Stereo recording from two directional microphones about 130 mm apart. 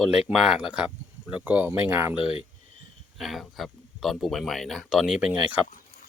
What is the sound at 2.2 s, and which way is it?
Cricket, 45° left (ahead or behind).